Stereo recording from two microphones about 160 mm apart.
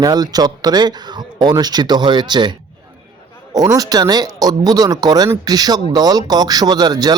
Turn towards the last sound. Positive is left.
turn(degrees=-25)  # may be behind; listen again after turning